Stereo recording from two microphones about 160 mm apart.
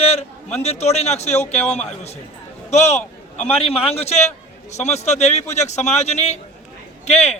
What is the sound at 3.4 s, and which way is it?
A man's voice, 40° left (ahead or behind).